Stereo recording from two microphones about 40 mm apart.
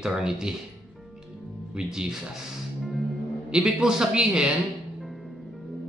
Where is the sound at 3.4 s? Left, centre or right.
Centre.